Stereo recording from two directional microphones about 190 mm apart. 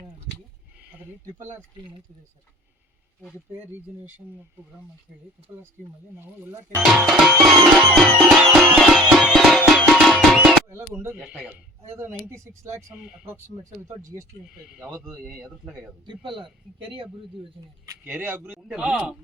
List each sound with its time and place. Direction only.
0.8 s a sound: 10° right (ahead or behind)
6.1 s speech: 15° right (ahead or behind)
6.7 s music: centre (ahead or behind)
11.8 s speech: 15° right (ahead or behind)
14.5 s music: 5° right (ahead or behind)
16.0 s speech: 25° right (ahead or behind)
17.8 s speech: 10° right (ahead or behind)
18.7 s music: 5° right (ahead or behind)